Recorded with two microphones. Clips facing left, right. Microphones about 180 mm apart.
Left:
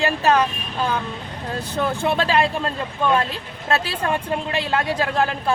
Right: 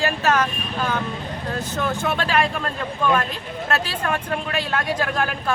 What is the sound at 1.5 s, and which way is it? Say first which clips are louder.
Speech: left 2 dB; 30° left (ahead or behind).